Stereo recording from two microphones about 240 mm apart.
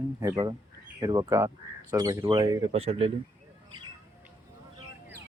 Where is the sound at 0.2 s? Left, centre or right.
Centre.